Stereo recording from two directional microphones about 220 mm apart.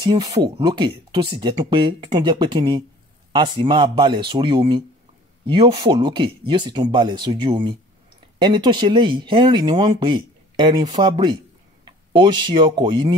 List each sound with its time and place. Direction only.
0.0 s speech: 15° right (ahead or behind)